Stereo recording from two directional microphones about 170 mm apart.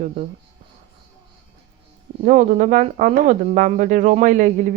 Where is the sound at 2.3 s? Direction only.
50° right (ahead or behind).